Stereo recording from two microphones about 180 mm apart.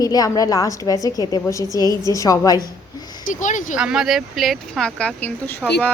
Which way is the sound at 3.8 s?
5° right (ahead or behind).